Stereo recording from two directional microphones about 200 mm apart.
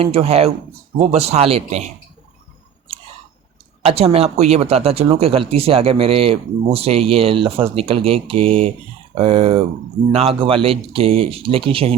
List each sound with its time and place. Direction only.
0.0 s speech: 30° right (ahead or behind)
3.8 s speech: 30° right (ahead or behind)